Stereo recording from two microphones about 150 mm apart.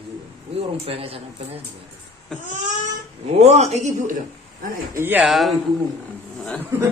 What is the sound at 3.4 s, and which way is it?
Speech, 45° right (ahead or behind).